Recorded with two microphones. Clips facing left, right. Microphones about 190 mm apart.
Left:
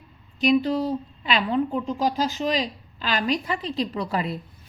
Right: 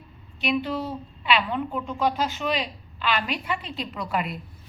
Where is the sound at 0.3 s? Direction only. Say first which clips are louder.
Left 6 dB; 40° left (ahead or behind).